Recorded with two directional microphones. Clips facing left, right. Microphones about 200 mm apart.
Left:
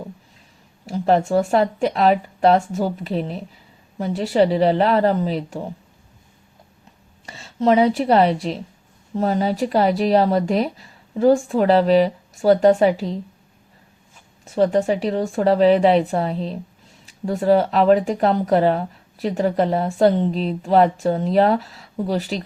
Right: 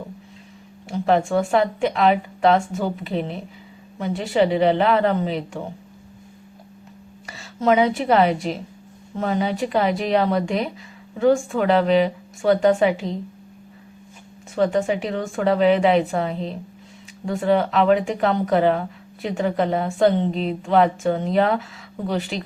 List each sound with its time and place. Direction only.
0.9 s speech: 40° left (ahead or behind)
7.3 s speech: 30° left (ahead or behind)
14.5 s speech: 35° left (ahead or behind)
20.1 s a woman's voice: centre (ahead or behind)
20.6 s speech: 35° left (ahead or behind)